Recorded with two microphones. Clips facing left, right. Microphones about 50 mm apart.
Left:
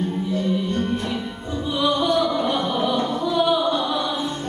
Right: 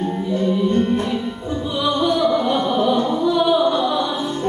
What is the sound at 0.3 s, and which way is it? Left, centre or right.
Music, right.